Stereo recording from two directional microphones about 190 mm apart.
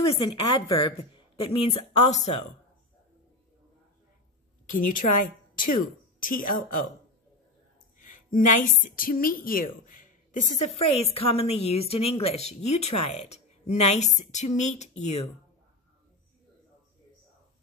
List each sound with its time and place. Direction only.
0.0 s speech: 30° left (ahead or behind)
4.6 s a woman's voice: 45° left (ahead or behind)
8.0 s a woman's voice: 45° left (ahead or behind)